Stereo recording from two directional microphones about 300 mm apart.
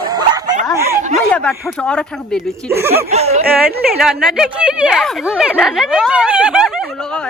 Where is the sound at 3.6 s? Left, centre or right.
Centre.